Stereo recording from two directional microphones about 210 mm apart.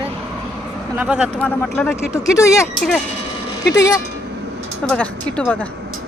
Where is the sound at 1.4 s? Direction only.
5° left (ahead or behind).